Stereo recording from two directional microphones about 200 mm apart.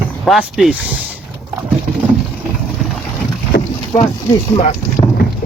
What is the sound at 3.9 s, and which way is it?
Speech, 20° left (ahead or behind).